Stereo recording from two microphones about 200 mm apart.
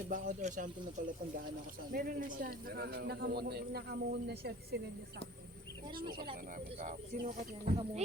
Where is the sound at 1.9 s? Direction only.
45° right (ahead or behind).